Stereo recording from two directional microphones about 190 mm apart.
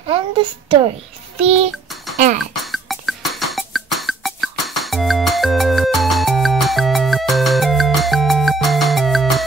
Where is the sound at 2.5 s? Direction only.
Centre (ahead or behind).